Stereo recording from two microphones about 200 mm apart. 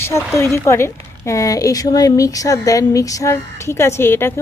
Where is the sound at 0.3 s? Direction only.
15° left (ahead or behind).